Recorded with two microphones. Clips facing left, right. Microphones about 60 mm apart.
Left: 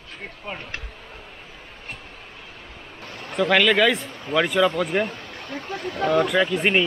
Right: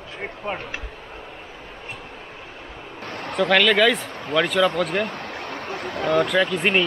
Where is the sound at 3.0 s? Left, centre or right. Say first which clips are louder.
Right 5 dB; right.